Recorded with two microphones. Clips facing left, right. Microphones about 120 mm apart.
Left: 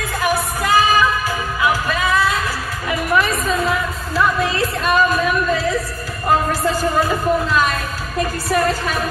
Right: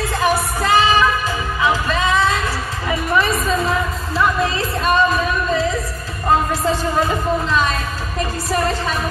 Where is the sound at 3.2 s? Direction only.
Centre (ahead or behind).